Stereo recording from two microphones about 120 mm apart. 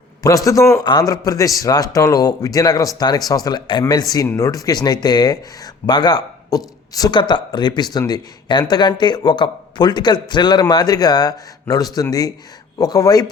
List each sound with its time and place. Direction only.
0.2 s a man's voice: 30° left (ahead or behind)